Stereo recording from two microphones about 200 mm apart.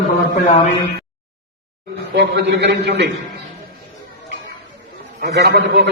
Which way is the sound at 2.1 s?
60° right (ahead or behind).